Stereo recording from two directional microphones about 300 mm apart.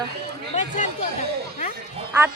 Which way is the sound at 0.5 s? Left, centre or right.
Left.